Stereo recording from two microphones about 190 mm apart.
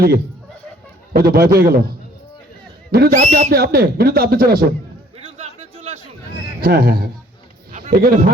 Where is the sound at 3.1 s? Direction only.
40° right (ahead or behind).